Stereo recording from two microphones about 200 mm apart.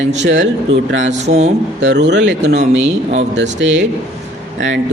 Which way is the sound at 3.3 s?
60° right (ahead or behind).